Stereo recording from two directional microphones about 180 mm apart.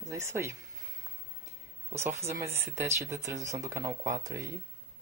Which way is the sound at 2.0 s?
15° right (ahead or behind).